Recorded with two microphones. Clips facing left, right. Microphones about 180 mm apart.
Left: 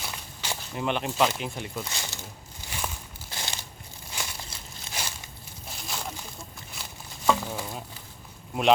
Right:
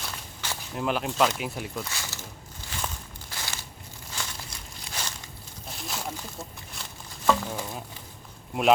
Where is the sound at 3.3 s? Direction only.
20° left (ahead or behind).